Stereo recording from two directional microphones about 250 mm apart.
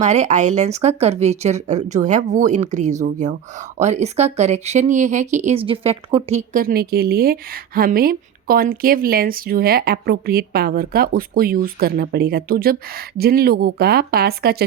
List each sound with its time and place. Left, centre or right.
0.0 s speech: right